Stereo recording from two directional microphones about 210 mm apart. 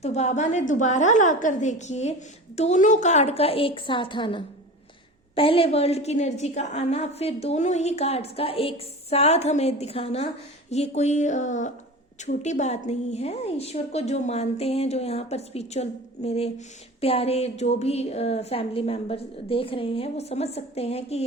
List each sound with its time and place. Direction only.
0.0 s a woman's voice: 30° left (ahead or behind)